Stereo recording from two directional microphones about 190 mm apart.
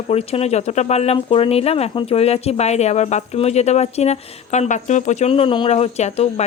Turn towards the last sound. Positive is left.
turn(degrees=35)  # may be behind; listen again after turning